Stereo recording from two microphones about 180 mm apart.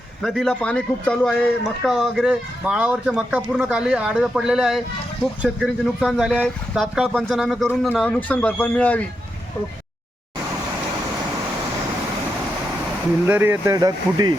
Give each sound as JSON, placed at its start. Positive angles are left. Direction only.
{"t": 0.2, "sound": "a man's voice", "side_deg": 0}
{"t": 13.2, "sound": "speech", "side_deg": -10}